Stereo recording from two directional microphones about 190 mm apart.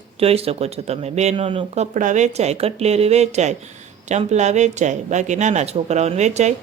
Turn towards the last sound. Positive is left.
turn(degrees=-35)  # may be behind; listen again after turning